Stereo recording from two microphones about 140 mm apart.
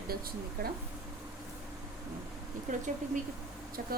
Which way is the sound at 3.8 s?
90° right.